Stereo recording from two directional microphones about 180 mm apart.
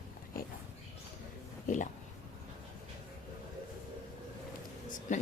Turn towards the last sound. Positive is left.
turn(degrees=40)  # may be behind; listen again after turning